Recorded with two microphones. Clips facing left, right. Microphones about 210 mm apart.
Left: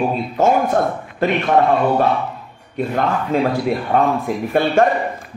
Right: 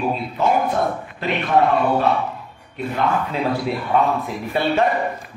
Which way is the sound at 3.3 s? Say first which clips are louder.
Left 4 dB; 45° left (ahead or behind).